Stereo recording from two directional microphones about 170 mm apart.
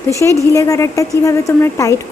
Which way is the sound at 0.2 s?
15° left (ahead or behind).